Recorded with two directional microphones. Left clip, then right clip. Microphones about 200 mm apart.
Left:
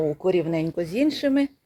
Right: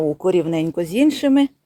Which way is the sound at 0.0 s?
45° right (ahead or behind).